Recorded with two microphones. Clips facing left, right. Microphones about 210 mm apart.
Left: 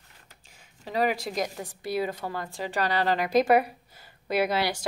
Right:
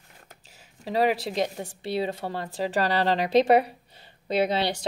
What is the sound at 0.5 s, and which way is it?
Speech, 35° right (ahead or behind).